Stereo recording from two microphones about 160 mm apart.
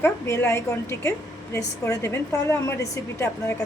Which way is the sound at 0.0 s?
15° left (ahead or behind).